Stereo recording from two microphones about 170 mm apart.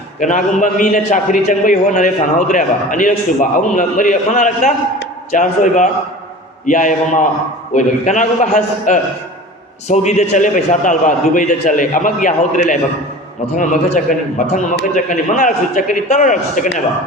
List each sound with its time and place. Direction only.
0.2 s a man's voice: 50° left (ahead or behind)